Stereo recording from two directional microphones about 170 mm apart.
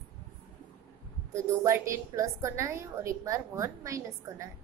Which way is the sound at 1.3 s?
15° right (ahead or behind).